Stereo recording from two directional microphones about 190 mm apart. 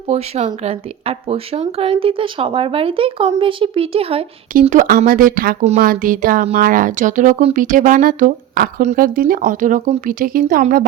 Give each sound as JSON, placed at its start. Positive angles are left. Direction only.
{"t": 0.1, "sound": "speech", "side_deg": -35}
{"t": 4.6, "sound": "speech", "side_deg": -40}